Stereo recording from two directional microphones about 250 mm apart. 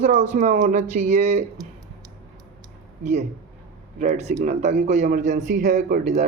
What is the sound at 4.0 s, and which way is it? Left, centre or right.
Speech, right.